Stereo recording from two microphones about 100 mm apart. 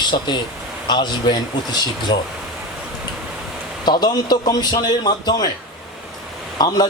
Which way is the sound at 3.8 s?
45° left (ahead or behind).